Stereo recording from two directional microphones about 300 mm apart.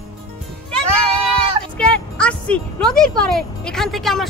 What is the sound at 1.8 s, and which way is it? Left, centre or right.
Speech, centre.